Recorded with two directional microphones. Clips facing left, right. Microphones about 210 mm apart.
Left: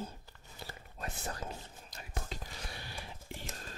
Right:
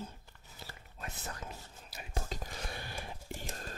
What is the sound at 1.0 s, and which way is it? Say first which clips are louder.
Whispering: left 3 dB; 35° left (ahead or behind).